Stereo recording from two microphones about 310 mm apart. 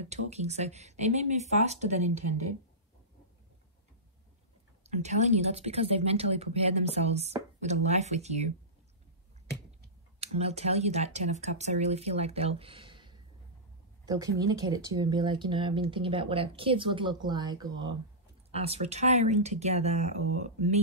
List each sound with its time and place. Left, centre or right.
0.0 s speech: right
4.8 s speech: right
10.2 s speech: centre